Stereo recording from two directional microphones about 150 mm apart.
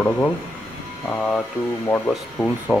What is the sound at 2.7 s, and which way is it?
Speech, 10° right (ahead or behind).